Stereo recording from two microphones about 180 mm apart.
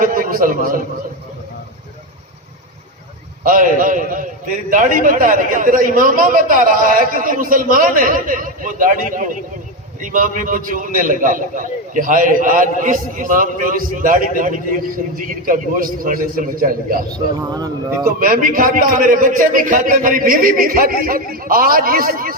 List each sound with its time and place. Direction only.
0.0 s a sound: 50° right (ahead or behind)
3.4 s a man's voice: 50° right (ahead or behind)
17.5 s a man's voice: 20° right (ahead or behind)
18.2 s a man's voice: 50° right (ahead or behind)